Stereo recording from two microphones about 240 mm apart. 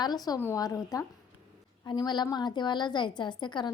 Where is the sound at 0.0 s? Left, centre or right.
Centre.